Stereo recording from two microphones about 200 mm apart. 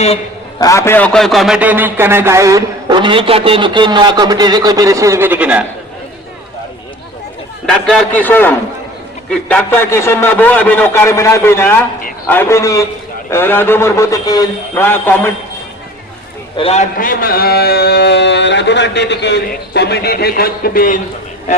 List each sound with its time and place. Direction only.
0.6 s a man's voice: 15° left (ahead or behind); by 5.6 s 5° right (ahead or behind)
7.7 s a man's voice: centre (ahead or behind)
16.6 s a man's voice: 30° left (ahead or behind)